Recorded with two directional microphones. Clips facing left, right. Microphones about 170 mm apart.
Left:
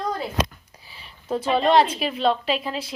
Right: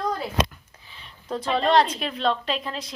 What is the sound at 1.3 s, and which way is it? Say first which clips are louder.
Speech: left 2 dB; 5° left (ahead or behind).